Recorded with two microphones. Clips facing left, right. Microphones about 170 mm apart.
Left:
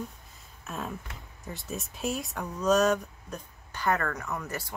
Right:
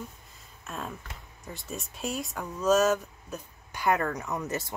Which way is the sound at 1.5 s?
Centre (ahead or behind).